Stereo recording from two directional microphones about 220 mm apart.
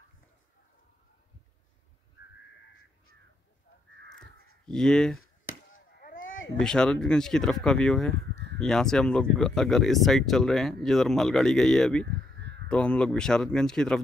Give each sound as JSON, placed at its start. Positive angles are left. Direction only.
{"t": 4.6, "sound": "speech", "side_deg": 5}
{"t": 5.2, "sound": "chop", "side_deg": 65}
{"t": 5.9, "sound": "a sound", "side_deg": 40}
{"t": 6.6, "sound": "speech", "side_deg": 5}